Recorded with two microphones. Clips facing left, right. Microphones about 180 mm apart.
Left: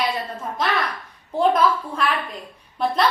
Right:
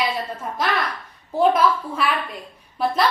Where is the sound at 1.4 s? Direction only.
5° right (ahead or behind).